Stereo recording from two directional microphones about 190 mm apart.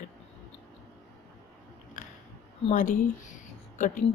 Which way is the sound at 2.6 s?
40° left (ahead or behind).